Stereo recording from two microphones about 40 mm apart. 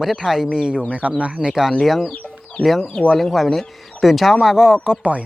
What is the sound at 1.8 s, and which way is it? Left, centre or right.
Speech, centre.